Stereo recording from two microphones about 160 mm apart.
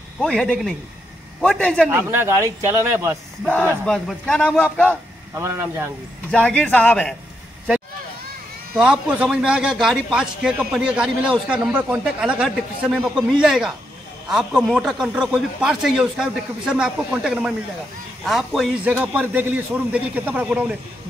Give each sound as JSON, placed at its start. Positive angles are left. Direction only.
{"t": 0.2, "sound": "a man's voice", "side_deg": 5}
{"t": 1.9, "sound": "a man's voice", "side_deg": -15}
{"t": 3.8, "sound": "a man's voice", "side_deg": 5}
{"t": 5.3, "sound": "a man's voice", "side_deg": -15}
{"t": 6.3, "sound": "a man's voice", "side_deg": 5}
{"t": 8.7, "sound": "a man's voice", "side_deg": -5}